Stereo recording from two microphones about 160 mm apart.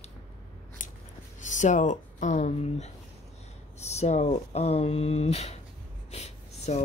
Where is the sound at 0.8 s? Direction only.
55° left (ahead or behind).